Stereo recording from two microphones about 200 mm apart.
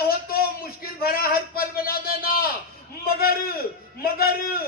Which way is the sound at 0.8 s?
50° left (ahead or behind).